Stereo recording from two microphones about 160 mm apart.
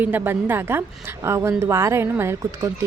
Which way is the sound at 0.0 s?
10° right (ahead or behind).